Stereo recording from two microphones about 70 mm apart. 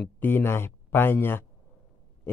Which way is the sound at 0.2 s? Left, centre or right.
Left.